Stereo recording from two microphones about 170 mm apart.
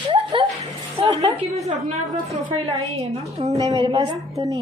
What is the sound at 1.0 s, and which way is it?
Speech, 35° right (ahead or behind).